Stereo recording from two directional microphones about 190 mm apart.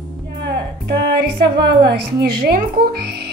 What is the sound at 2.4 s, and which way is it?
Speech, 55° right (ahead or behind).